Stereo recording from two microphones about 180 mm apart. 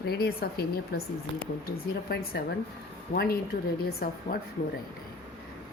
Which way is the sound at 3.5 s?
50° left (ahead or behind).